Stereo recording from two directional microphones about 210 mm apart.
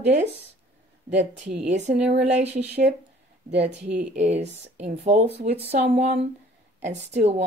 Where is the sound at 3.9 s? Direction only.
30° right (ahead or behind).